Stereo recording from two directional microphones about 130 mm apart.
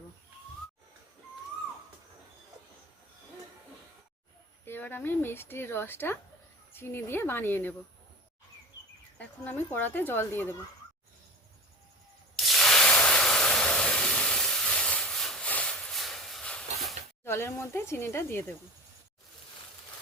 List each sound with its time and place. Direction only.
4.6 s speech: 15° left (ahead or behind)
9.1 s speech: 15° left (ahead or behind)
12.4 s a sound: centre (ahead or behind)
17.2 s speech: 20° left (ahead or behind)